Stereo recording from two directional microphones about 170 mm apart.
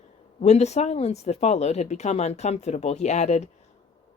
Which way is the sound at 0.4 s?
40° left (ahead or behind).